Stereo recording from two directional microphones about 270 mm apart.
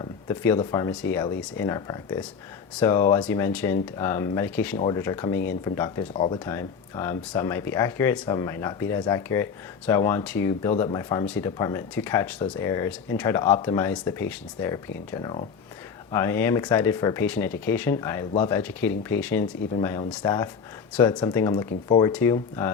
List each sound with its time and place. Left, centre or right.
0.0 s speech: centre